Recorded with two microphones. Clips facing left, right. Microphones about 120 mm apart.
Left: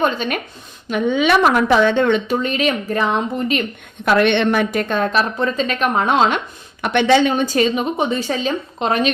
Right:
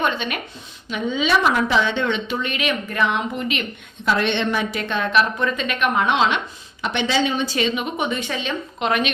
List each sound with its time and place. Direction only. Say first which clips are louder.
0.0 s a woman's voice: left 4 dB; 40° left (ahead or behind)
0.9 s a woman's voice: left 5 dB; 55° left (ahead or behind); by 3.6 s 35° left (ahead or behind)
4.0 s a woman's voice: left 6 dB; 60° left (ahead or behind); by 6.4 s 45° left (ahead or behind)
6.8 s a woman's voice: left 7 dB; 55° left (ahead or behind); by 9.1 s 35° left (ahead or behind)